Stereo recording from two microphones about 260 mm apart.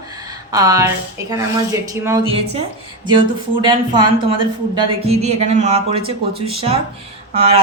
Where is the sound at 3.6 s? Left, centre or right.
Centre.